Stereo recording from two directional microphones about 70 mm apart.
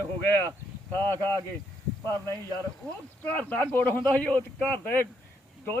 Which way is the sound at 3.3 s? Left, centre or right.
Left.